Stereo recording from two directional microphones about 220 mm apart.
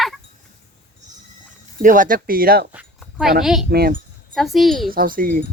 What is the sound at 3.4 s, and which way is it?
Speech, centre (ahead or behind).